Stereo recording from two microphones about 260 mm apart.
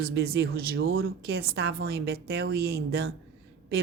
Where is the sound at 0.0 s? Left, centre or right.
Right.